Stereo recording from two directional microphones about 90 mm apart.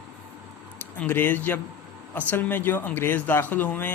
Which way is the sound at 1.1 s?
20° left (ahead or behind).